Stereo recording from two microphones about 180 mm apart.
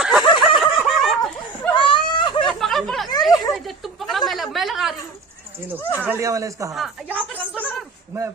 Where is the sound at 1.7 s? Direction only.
25° left (ahead or behind).